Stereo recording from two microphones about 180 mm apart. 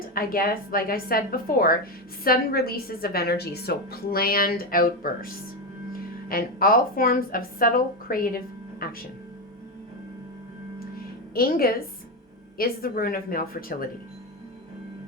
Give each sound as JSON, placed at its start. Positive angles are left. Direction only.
{"t": 0.1, "sound": "a woman's voice", "side_deg": 55}
{"t": 11.3, "sound": "a woman's voice", "side_deg": 55}